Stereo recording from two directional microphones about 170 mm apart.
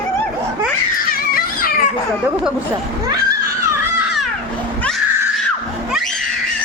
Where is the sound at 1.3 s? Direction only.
60° left (ahead or behind).